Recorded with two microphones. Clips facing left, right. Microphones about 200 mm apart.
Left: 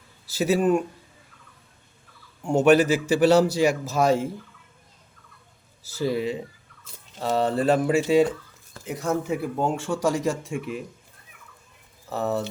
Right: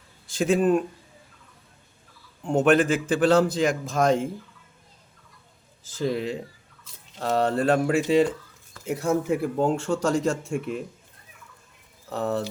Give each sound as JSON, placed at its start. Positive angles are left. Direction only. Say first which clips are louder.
{"t": 0.3, "sound": "a man's voice", "louder": "even", "side_deg": 5}
{"t": 2.4, "sound": "a man's voice", "louder": "left 2 dB", "side_deg": 5}
{"t": 5.9, "sound": "a man's voice", "louder": "left 1 dB", "side_deg": 5}
{"t": 12.1, "sound": "a man's voice", "louder": "even", "side_deg": 5}